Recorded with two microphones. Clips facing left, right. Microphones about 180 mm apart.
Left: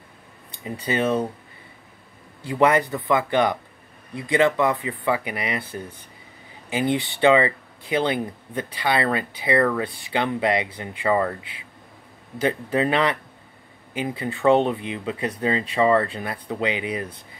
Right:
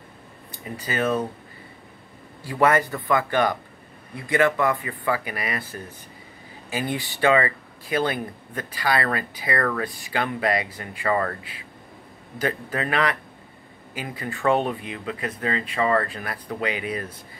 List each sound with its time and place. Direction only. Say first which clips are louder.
0.7 s speech: left 2 dB; 25° left (ahead or behind)
2.4 s speech: left 1 dB; 20° left (ahead or behind)